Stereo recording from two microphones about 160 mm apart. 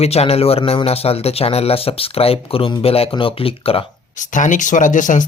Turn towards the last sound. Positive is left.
turn(degrees=55)  # may be behind; listen again after turning